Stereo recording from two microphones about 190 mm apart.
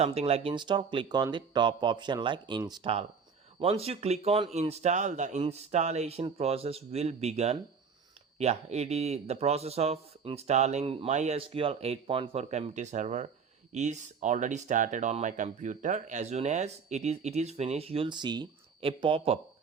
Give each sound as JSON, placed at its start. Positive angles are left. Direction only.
{"t": 0.0, "sound": "speech", "side_deg": -30}